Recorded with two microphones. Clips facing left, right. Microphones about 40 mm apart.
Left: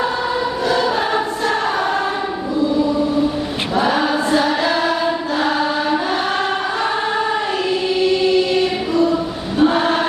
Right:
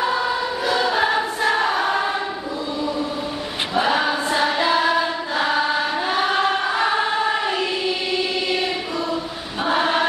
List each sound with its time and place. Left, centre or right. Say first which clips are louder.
0.7 s choir: even; centre
3.7 s choir: left 3 dB; centre
7.9 s choir: left 8 dB; centre